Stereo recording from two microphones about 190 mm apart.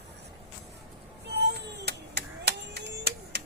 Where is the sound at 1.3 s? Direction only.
60° right (ahead or behind).